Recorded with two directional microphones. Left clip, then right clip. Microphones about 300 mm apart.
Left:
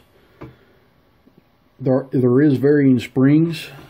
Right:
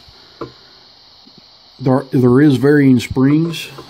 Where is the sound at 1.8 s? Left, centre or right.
Right.